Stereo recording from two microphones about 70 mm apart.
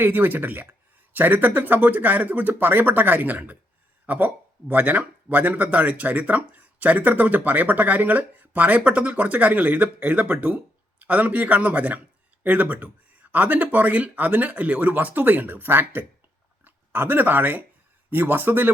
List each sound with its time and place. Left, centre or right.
0.0 s speech: right